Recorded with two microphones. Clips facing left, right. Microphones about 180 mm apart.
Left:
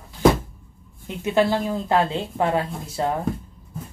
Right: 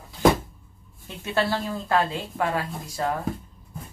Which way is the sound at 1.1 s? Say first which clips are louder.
Left 5 dB; 20° left (ahead or behind).